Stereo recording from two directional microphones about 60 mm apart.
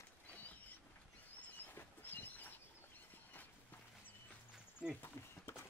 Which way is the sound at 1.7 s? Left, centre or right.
Left.